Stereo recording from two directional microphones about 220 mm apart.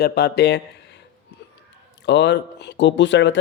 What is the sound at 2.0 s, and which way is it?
Speech, 50° left (ahead or behind).